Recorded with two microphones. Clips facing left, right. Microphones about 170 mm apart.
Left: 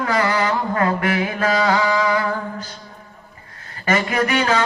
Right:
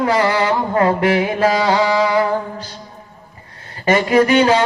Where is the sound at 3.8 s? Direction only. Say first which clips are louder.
Right 6 dB; 30° right (ahead or behind).